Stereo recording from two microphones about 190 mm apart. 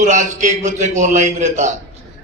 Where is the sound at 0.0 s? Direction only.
40° right (ahead or behind).